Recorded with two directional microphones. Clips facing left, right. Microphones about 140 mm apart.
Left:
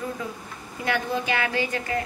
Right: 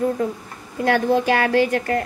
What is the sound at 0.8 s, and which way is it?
A woman's voice, 60° right (ahead or behind).